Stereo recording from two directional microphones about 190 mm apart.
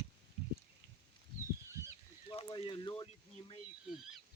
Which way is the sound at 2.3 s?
30° left (ahead or behind).